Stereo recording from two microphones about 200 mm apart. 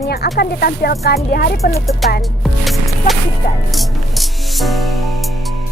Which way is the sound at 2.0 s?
Centre (ahead or behind).